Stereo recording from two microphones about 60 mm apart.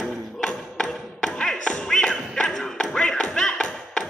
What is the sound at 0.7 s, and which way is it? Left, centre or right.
Thump, centre.